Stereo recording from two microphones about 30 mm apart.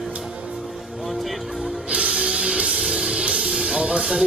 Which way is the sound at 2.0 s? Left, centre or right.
Right.